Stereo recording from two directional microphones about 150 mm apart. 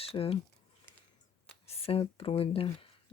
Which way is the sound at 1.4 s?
40° left (ahead or behind).